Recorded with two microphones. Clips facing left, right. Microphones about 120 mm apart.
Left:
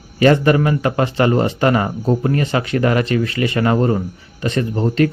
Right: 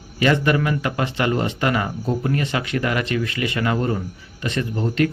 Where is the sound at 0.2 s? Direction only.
40° left (ahead or behind).